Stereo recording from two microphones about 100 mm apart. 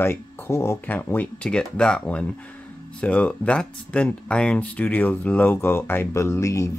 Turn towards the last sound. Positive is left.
turn(degrees=30)  # may be behind; listen again after turning